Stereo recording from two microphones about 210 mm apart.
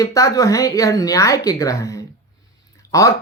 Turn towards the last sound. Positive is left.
turn(degrees=15)  # may be behind; listen again after turning